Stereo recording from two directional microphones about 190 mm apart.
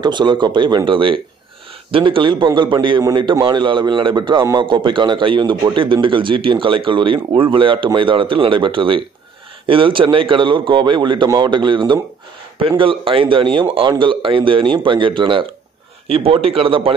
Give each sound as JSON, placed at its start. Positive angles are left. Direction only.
{"t": 0.0, "sound": "a man's voice", "side_deg": -25}